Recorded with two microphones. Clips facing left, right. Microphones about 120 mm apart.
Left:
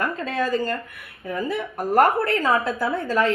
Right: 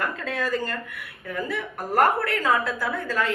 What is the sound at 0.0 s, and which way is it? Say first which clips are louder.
A woman's voice: left 3 dB; 20° left (ahead or behind).